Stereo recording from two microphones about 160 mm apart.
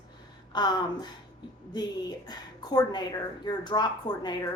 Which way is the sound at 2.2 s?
25° left (ahead or behind).